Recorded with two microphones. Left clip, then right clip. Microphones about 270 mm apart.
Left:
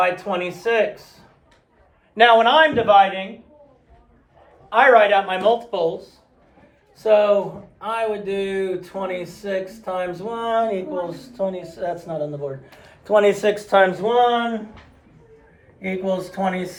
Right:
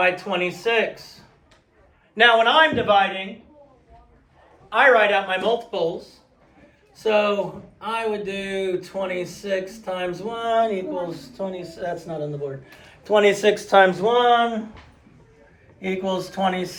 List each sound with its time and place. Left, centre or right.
0.0 s speech: centre
2.1 s a woman's voice: left
4.7 s a woman's voice: left
7.0 s speech: centre
15.8 s speech: centre